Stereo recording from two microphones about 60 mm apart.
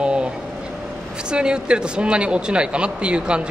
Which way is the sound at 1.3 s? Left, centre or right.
Centre.